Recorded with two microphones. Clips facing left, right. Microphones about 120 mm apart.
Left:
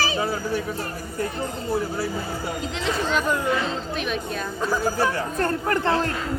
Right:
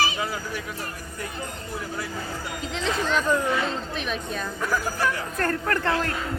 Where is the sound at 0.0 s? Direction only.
35° left (ahead or behind).